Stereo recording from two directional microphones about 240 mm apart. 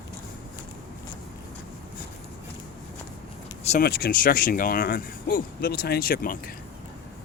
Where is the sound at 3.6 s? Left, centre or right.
Left.